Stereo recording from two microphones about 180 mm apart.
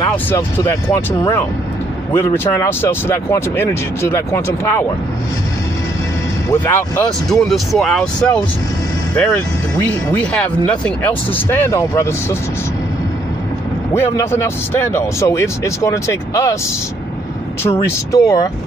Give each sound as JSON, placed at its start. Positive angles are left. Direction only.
{"t": 0.1, "sound": "speech", "side_deg": 10}
{"t": 6.5, "sound": "speech", "side_deg": 10}
{"t": 13.9, "sound": "speech", "side_deg": 15}
{"t": 17.8, "sound": "speech", "side_deg": 20}